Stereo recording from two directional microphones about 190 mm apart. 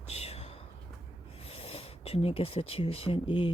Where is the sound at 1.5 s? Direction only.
30° left (ahead or behind).